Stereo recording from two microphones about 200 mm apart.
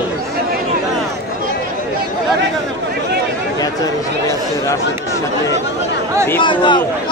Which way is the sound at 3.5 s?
20° left (ahead or behind).